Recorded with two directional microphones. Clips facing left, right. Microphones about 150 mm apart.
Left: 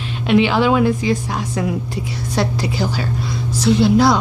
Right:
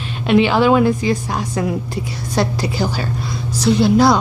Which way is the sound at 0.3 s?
40° right (ahead or behind).